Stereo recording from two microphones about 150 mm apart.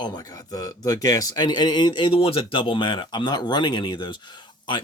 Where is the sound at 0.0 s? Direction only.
25° left (ahead or behind).